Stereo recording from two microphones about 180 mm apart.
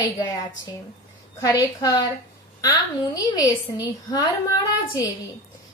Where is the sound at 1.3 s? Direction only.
20° left (ahead or behind).